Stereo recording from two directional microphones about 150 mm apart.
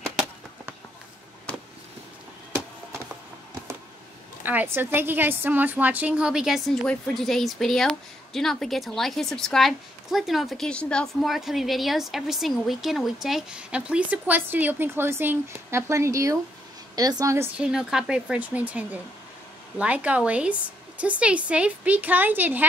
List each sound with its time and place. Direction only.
1.5 s a sound: 10° left (ahead or behind)
4.4 s a woman's voice: 15° right (ahead or behind)
17.6 s a woman's voice: 5° right (ahead or behind)